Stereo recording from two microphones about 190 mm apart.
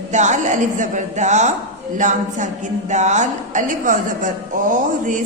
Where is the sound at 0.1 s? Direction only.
40° right (ahead or behind).